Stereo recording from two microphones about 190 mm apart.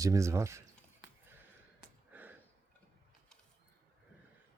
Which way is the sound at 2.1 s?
10° right (ahead or behind).